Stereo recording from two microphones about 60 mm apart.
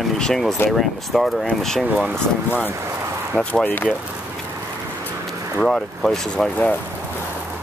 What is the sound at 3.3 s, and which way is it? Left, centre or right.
Speech, centre.